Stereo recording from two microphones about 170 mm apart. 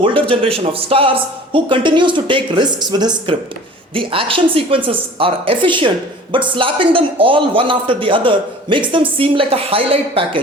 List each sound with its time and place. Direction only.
0.0 s a man's voice: 30° right (ahead or behind)